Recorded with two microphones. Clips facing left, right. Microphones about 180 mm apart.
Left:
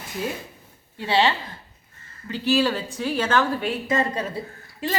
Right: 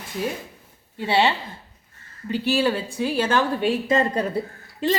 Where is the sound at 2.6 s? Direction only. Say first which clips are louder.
Right 2 dB; 10° right (ahead or behind).